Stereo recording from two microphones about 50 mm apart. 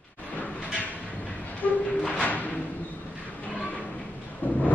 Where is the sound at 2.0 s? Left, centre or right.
Left.